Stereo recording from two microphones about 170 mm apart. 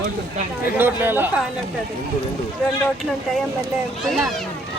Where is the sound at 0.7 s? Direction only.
10° right (ahead or behind).